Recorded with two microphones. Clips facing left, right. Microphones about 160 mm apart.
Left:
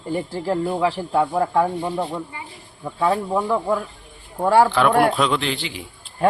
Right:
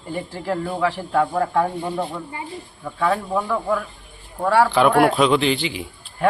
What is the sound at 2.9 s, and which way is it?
A man's voice, 20° left (ahead or behind).